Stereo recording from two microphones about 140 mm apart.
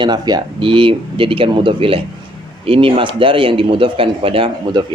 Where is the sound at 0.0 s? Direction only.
30° right (ahead or behind).